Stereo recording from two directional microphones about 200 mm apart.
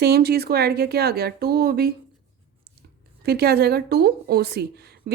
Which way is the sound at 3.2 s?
55° right (ahead or behind).